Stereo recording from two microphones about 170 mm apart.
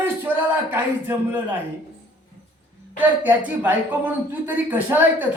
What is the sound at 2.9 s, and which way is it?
Speech, 10° right (ahead or behind).